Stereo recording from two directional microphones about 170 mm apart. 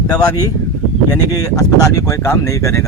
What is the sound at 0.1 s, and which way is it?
Speech, 20° left (ahead or behind).